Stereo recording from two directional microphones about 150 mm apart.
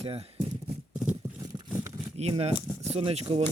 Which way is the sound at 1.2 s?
15° right (ahead or behind).